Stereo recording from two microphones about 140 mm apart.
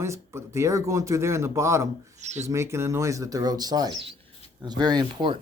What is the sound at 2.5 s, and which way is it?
Speech, 20° right (ahead or behind).